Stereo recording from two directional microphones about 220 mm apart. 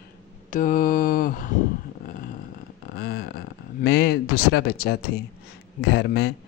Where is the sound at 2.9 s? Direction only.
45° left (ahead or behind).